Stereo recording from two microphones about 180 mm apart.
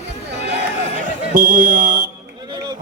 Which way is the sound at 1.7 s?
45° right (ahead or behind).